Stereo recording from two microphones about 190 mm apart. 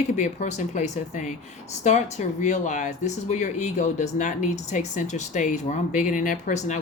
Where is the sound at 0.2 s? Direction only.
40° left (ahead or behind).